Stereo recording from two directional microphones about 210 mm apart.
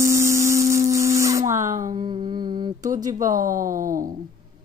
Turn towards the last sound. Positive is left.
turn(degrees=-40)  # may be behind; listen again after turning